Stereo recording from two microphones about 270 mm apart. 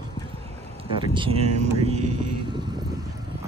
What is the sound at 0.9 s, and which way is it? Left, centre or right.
Speech, centre.